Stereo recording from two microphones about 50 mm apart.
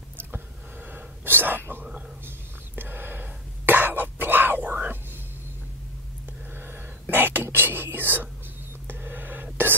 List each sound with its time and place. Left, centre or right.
0.9 s whispering: right
2.2 s cough: right
6.7 s a sound: right
7.5 s whispering: right